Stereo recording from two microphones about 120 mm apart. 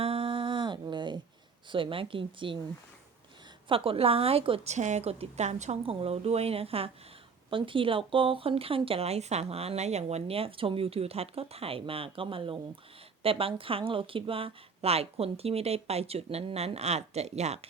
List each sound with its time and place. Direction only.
0.0 s humming: 50° right (ahead or behind)
1.7 s speech: 45° right (ahead or behind)
3.7 s speech: 50° right (ahead or behind)
4.7 s a woman's voice: 75° right (ahead or behind)
5.8 s speech: 50° right (ahead or behind); by 17.7 s 65° right (ahead or behind)